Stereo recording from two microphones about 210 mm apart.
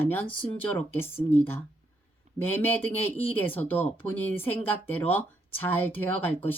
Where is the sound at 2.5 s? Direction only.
10° left (ahead or behind).